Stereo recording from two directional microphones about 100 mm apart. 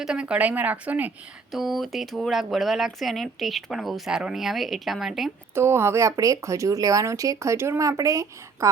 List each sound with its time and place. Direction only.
0.0 s speech: 10° right (ahead or behind)
1.5 s speech: centre (ahead or behind)
5.5 s speech: 25° right (ahead or behind)